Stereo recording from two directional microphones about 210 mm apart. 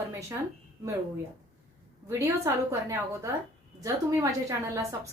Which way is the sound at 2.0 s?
15° right (ahead or behind).